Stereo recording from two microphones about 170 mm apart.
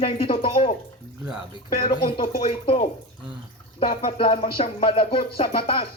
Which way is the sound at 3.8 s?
30° left (ahead or behind).